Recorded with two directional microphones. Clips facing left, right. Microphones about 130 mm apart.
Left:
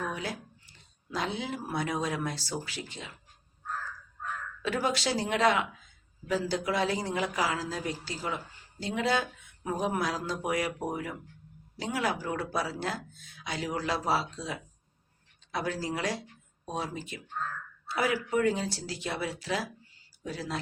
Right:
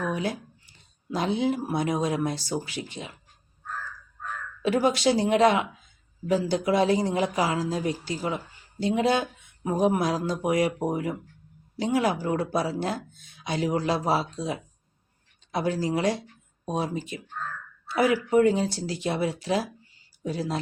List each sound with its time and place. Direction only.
0.0 s speech: 20° right (ahead or behind)
4.6 s speech: 20° right (ahead or behind)